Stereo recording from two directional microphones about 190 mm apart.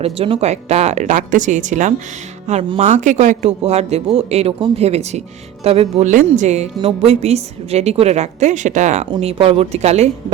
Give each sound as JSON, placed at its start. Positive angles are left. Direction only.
{"t": 0.0, "sound": "a man's voice", "side_deg": -30}